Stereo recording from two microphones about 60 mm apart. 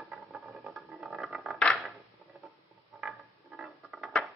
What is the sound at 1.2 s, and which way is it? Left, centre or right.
Scratch, centre.